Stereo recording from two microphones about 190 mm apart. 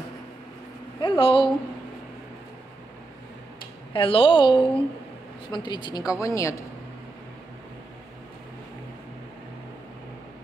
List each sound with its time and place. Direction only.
1.0 s a woman's voice: 25° left (ahead or behind)
3.9 s a woman's voice: 25° left (ahead or behind)